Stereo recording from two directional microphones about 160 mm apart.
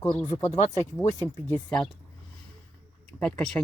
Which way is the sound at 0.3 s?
20° left (ahead or behind).